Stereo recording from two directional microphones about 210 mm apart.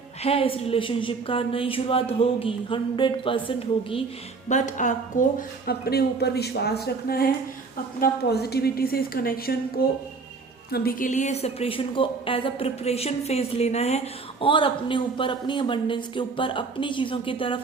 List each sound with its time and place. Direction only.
0.2 s a woman's voice: 30° left (ahead or behind)
4.4 s a woman's voice: 35° left (ahead or behind)